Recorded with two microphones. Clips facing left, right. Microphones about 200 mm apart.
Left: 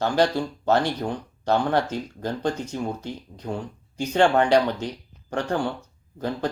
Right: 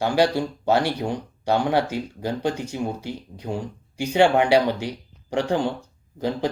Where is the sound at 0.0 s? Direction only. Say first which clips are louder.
Right 1 dB; 10° right (ahead or behind).